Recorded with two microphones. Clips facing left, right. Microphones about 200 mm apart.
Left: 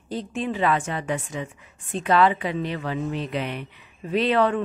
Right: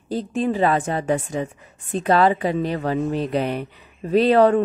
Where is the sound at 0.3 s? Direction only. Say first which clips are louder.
Right 4 dB; 40° right (ahead or behind).